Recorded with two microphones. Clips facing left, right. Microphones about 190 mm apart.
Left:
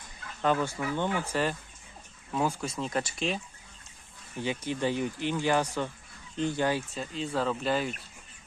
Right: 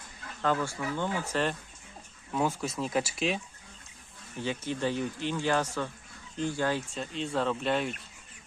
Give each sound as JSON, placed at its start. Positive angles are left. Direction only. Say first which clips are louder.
{"t": 0.4, "sound": "speech", "louder": "left 2 dB", "side_deg": 20}
{"t": 1.3, "sound": "speech", "louder": "even", "side_deg": 5}
{"t": 4.4, "sound": "speech", "louder": "left 1 dB", "side_deg": 15}